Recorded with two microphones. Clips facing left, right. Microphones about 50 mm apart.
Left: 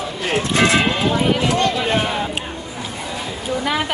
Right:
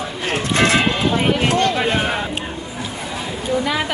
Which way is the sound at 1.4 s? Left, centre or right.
Right.